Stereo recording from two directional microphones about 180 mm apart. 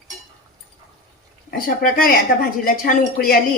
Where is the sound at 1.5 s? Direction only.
55° left (ahead or behind).